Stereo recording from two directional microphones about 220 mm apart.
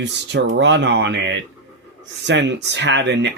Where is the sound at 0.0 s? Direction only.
50° right (ahead or behind).